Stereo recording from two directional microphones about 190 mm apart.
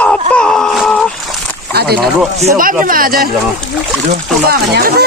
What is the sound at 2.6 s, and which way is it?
Speech, 45° right (ahead or behind).